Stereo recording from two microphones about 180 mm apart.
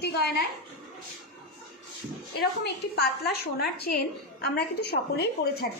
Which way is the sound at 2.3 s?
60° left (ahead or behind).